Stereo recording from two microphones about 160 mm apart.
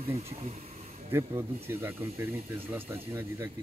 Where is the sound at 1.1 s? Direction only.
15° right (ahead or behind).